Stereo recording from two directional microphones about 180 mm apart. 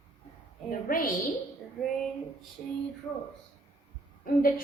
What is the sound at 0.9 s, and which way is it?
Speech, 50° left (ahead or behind).